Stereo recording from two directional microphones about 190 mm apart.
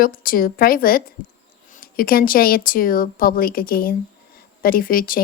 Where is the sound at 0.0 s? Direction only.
50° left (ahead or behind).